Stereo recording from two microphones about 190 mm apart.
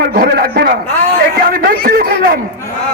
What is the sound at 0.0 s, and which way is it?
Speech, 55° right (ahead or behind).